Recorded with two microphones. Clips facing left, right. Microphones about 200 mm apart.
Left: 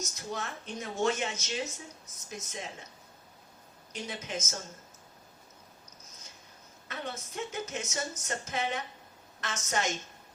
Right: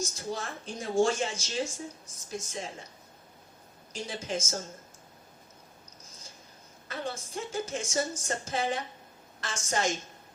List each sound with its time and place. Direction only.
0.0 s a woman's voice: 30° right (ahead or behind)
3.9 s a woman's voice: 30° right (ahead or behind)
6.8 s a woman's voice: 30° right (ahead or behind)